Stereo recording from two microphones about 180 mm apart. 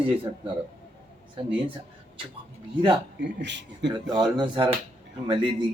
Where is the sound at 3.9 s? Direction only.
25° right (ahead or behind).